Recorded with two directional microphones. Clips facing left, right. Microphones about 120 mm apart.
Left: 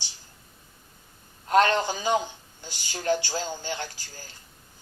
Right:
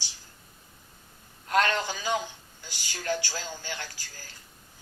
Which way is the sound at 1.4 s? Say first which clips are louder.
Left 5 dB; 30° left (ahead or behind).